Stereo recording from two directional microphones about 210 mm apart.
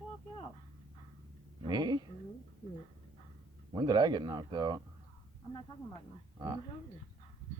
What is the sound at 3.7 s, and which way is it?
Speech, 20° right (ahead or behind).